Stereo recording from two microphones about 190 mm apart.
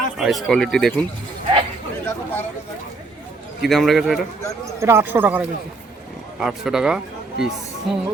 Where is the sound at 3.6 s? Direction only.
Centre (ahead or behind).